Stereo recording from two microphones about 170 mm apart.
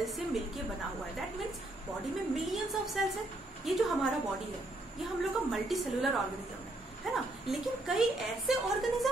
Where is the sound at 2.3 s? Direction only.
Centre (ahead or behind).